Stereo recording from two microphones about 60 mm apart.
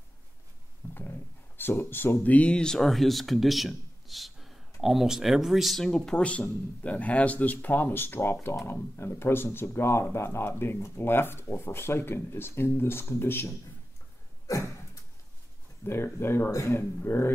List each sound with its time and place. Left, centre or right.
0.8 s dog: left
1.6 s speech: left
2.5 s a man's voice: centre
5.9 s speech: centre
6.2 s speech: left
15.8 s speech: left